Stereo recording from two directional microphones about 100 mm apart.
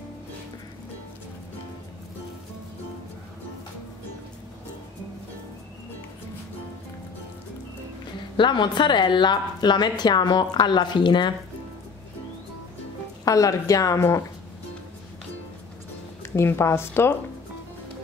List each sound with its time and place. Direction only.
8.4 s a woman's voice: 50° left (ahead or behind)
13.2 s a woman's voice: 35° left (ahead or behind)
16.2 s speech: 25° left (ahead or behind)